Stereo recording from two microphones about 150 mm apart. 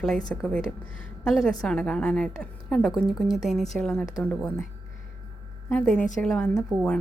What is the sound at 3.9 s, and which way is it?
Speech, 20° left (ahead or behind).